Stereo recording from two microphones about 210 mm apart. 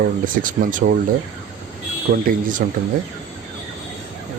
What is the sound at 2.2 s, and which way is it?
Speech, 40° right (ahead or behind).